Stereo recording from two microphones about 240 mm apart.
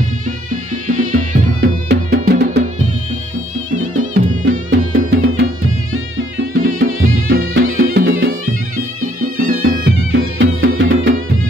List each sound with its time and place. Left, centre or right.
1.0 s music: right
4.3 s music: right
5.1 s music: right
9.2 s music: right
10.1 s music: right